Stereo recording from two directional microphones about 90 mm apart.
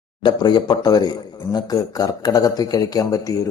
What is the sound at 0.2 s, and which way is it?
Speech, 55° left (ahead or behind).